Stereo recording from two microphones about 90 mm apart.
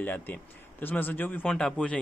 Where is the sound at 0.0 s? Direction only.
20° left (ahead or behind).